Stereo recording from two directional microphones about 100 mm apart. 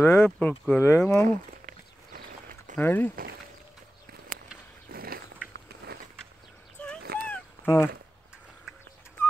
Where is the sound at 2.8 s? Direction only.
20° left (ahead or behind).